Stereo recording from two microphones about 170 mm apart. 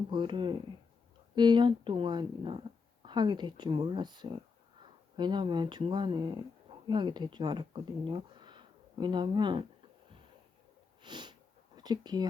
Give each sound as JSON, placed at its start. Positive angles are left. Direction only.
{"t": 0.1, "sound": "speech", "side_deg": -30}
{"t": 11.0, "sound": "a sound", "side_deg": -25}
{"t": 11.8, "sound": "speech", "side_deg": -25}